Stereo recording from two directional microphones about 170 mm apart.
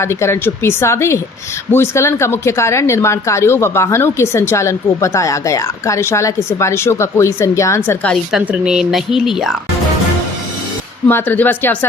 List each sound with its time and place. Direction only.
0.0 s a woman's voice: 15° left (ahead or behind)
8.1 s speech: 5° right (ahead or behind)
11.1 s a woman's voice: 10° left (ahead or behind)